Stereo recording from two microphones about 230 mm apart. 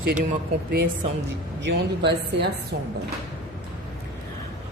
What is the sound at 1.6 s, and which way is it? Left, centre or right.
Speech, right.